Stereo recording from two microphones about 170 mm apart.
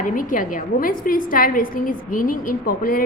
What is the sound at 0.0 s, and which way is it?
A woman's voice, 50° left (ahead or behind).